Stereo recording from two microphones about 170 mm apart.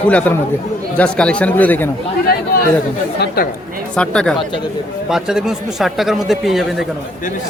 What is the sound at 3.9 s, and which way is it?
Speech, 5° left (ahead or behind).